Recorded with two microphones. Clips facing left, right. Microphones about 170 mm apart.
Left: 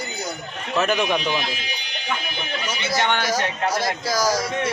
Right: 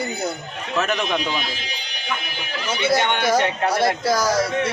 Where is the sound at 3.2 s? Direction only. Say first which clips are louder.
Right 4 dB; 60° right (ahead or behind).